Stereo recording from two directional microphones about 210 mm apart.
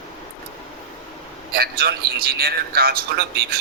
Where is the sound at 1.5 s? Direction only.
50° right (ahead or behind).